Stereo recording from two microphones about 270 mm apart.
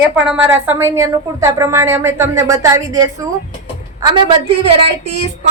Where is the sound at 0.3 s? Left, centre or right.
Centre.